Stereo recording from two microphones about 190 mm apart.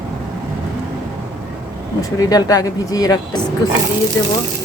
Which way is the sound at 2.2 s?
20° left (ahead or behind).